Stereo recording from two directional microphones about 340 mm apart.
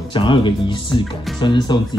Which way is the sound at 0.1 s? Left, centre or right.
Centre.